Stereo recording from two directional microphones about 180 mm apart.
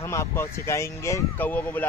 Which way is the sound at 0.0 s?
15° left (ahead or behind).